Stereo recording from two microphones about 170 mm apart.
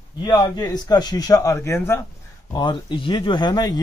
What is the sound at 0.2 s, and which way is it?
Speech, 25° left (ahead or behind).